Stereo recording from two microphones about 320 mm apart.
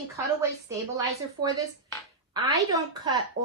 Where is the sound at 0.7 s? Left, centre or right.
Centre.